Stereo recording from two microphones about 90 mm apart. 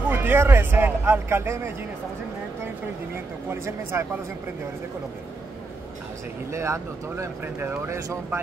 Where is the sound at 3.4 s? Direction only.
30° right (ahead or behind).